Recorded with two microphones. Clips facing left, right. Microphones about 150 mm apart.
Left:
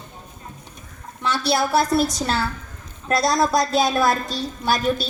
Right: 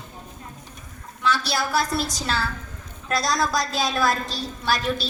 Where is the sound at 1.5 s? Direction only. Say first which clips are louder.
Left 5 dB; 25° left (ahead or behind).